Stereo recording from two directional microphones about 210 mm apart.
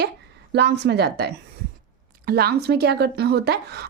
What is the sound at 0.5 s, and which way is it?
Speech, 55° right (ahead or behind).